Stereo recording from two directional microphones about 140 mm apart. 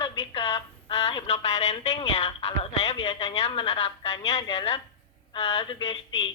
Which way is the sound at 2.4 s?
45° left (ahead or behind).